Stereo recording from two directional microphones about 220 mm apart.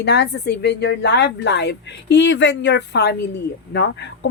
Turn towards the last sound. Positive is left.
turn(degrees=50)  # may be behind; listen again after turning